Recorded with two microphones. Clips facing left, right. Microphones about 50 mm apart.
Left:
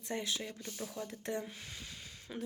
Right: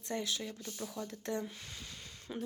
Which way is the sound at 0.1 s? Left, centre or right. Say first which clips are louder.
Right 1 dB; left.